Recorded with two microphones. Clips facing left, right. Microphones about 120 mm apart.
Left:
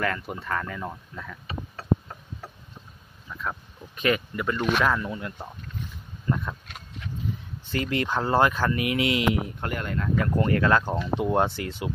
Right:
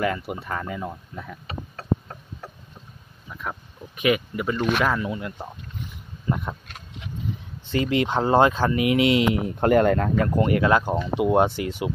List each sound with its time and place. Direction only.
0.0 s speech: 10° right (ahead or behind)
1.1 s speech: 30° right (ahead or behind)
3.3 s speech: 15° right (ahead or behind)
6.2 s speech: 15° right (ahead or behind)
7.7 s speech: 20° right (ahead or behind); by 10.1 s 45° right (ahead or behind)
10.3 s speech: 15° right (ahead or behind)